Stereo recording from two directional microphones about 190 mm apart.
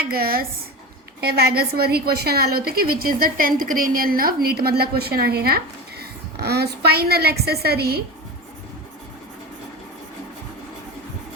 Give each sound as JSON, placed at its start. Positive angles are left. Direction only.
{"t": 0.0, "sound": "a woman's voice", "side_deg": -55}